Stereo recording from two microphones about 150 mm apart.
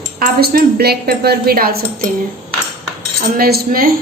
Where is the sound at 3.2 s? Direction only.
85° right.